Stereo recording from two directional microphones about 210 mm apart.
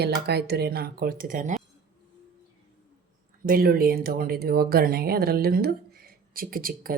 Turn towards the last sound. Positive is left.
turn(degrees=-45)  # may be behind; listen again after turning